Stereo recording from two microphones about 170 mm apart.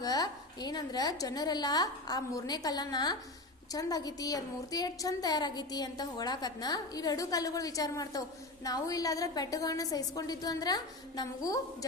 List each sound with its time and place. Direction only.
0.0 s a woman's voice: 20° left (ahead or behind)